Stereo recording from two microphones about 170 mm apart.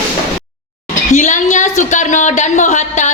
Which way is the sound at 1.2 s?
45° left (ahead or behind).